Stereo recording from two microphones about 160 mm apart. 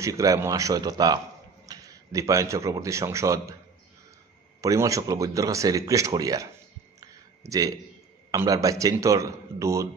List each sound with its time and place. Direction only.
0.0 s a man's voice: 20° right (ahead or behind)
4.6 s a man's voice: 20° right (ahead or behind)
7.0 s a sound: 20° right (ahead or behind)
8.3 s a man's voice: 20° right (ahead or behind)